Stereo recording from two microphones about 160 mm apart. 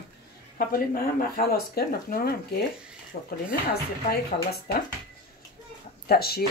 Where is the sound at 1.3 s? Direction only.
75° left (ahead or behind).